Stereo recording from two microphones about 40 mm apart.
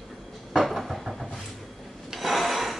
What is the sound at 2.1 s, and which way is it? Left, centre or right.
Filing, centre.